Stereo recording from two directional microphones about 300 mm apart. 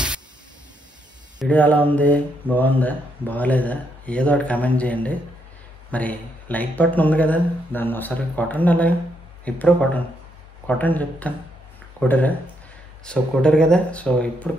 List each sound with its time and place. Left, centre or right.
1.4 s speech: centre